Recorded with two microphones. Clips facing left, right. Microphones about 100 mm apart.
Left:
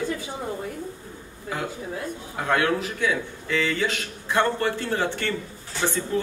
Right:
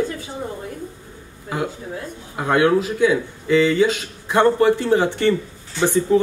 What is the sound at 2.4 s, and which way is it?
Speech, 20° right (ahead or behind).